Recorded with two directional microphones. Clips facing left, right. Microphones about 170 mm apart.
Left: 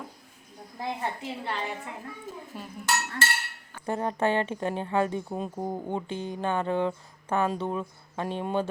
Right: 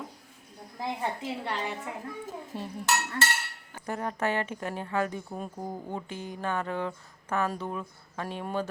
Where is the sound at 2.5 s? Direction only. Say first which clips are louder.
Right 6 dB; 25° right (ahead or behind).